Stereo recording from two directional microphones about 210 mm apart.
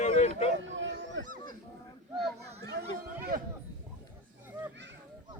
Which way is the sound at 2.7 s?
45° right (ahead or behind).